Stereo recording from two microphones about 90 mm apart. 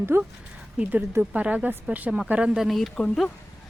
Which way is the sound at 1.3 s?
15° right (ahead or behind).